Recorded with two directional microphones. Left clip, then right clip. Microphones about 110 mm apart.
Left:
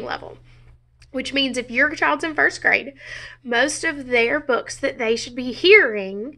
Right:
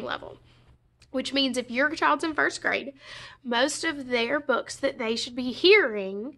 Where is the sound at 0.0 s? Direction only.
15° right (ahead or behind).